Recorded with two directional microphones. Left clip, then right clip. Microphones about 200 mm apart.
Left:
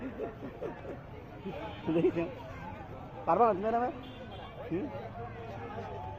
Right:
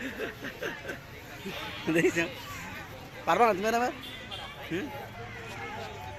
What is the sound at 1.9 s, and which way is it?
Speech, 15° right (ahead or behind).